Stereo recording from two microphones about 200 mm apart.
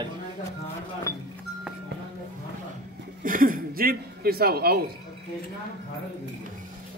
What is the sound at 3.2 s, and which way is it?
Speech, 45° right (ahead or behind).